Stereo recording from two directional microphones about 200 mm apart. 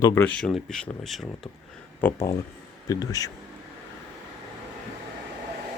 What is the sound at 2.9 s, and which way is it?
Speech, 15° left (ahead or behind).